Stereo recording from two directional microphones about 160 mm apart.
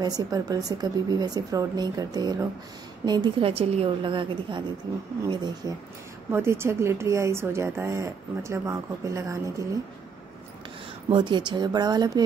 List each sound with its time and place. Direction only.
0.0 s a woman's voice: 25° right (ahead or behind)
11.1 s speech: 30° right (ahead or behind)